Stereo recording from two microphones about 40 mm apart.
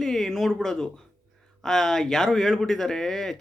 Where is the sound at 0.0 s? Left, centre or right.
Centre.